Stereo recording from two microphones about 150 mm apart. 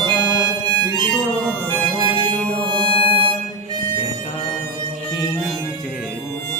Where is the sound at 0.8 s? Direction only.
30° right (ahead or behind).